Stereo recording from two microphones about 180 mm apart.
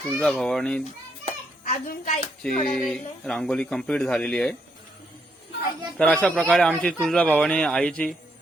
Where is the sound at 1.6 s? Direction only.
45° left (ahead or behind).